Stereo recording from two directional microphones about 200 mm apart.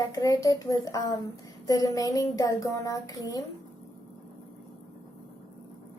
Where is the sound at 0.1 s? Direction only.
15° left (ahead or behind).